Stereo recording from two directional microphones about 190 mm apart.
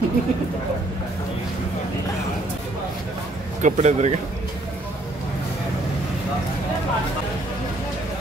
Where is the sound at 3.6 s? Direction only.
35° right (ahead or behind).